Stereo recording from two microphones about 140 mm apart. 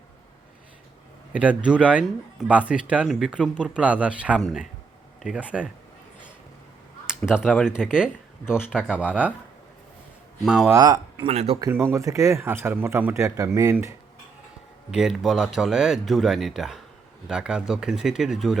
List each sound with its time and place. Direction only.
1.3 s speech: 10° right (ahead or behind)
7.1 s speech: 5° right (ahead or behind)
10.4 s speech: centre (ahead or behind)
10.7 s speech: 25° right (ahead or behind)
11.3 s speech: 45° right (ahead or behind)
11.6 s speech: 20° right (ahead or behind)
14.8 s speech: centre (ahead or behind)